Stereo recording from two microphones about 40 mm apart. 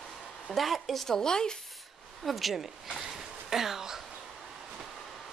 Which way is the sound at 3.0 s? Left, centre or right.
Centre.